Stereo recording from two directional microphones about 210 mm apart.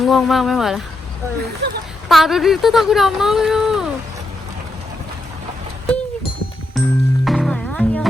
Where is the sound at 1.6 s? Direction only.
55° right (ahead or behind).